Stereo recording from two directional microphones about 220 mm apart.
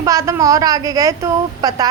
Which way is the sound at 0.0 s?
15° right (ahead or behind).